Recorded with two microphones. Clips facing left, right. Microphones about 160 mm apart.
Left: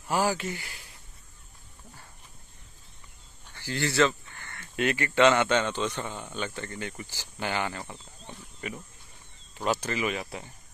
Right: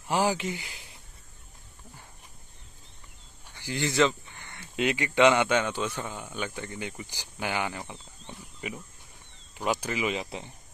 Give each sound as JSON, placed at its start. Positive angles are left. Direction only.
{"t": 0.1, "sound": "speech", "side_deg": -15}
{"t": 3.4, "sound": "speech", "side_deg": -15}